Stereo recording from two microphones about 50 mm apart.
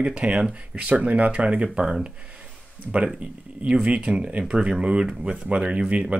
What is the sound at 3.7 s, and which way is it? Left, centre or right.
Speech, right.